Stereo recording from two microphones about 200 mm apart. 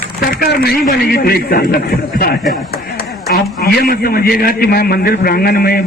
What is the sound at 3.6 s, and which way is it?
A man's voice, 50° left (ahead or behind).